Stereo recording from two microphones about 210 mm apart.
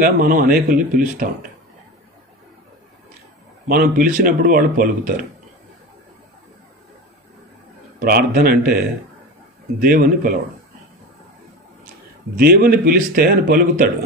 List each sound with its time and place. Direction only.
0.0 s speech: 40° right (ahead or behind)
3.6 s speech: 45° right (ahead or behind)
8.0 s a man's voice: 45° right (ahead or behind)
12.4 s a man's voice: 45° right (ahead or behind)